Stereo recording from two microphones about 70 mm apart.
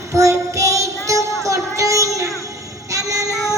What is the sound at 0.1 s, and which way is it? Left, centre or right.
Child singing, right.